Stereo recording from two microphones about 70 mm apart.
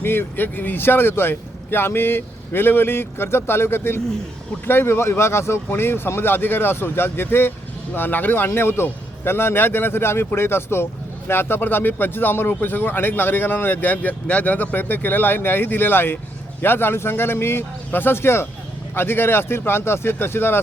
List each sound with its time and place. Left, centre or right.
0.0 s speech: left